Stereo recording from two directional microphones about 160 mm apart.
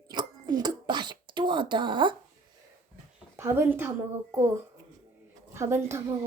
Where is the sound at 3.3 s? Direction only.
15° right (ahead or behind).